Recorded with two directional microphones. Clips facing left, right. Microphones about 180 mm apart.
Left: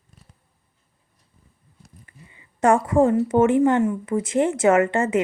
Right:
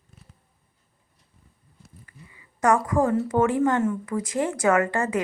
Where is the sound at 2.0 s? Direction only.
25° left (ahead or behind).